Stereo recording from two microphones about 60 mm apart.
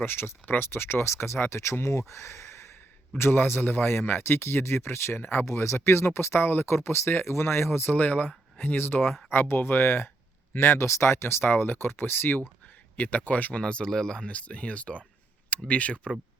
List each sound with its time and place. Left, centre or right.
0.0 s speech: left
5.5 s speech: left
7.9 s speech: left
13.6 s speech: centre